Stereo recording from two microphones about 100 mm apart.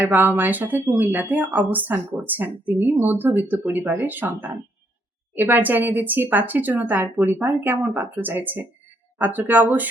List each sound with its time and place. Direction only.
0.0 s speech: 20° right (ahead or behind)